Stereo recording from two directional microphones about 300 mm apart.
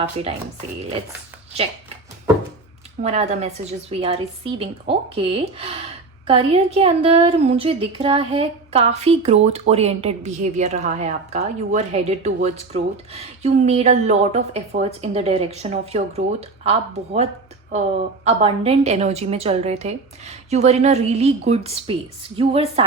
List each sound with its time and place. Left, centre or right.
0.2 s a woman's voice: centre
3.0 s a woman's voice: right
18.3 s a woman's voice: centre